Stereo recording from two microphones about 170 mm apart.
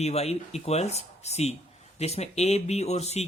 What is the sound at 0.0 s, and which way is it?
Speech, 40° left (ahead or behind).